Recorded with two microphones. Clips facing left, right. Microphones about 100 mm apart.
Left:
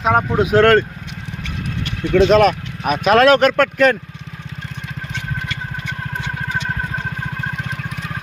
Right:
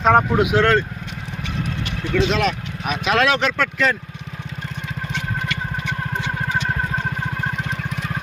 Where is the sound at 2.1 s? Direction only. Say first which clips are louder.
Left 8 dB; 45° left (ahead or behind).